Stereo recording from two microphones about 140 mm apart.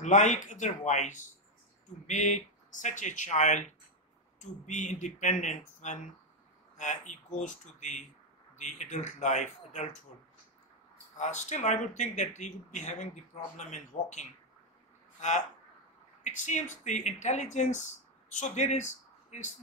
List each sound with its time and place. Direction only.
0.0 s speech: 60° left (ahead or behind)
11.1 s speech: 55° left (ahead or behind)